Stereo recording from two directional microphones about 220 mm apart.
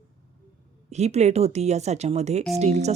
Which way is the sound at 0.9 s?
30° right (ahead or behind).